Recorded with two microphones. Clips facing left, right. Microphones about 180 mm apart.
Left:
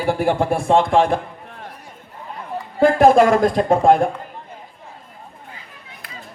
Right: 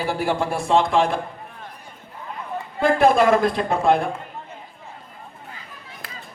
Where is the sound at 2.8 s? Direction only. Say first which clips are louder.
Left 4 dB; 45° left (ahead or behind).